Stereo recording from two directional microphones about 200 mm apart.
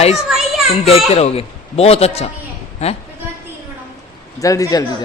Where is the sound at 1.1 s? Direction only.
30° left (ahead or behind).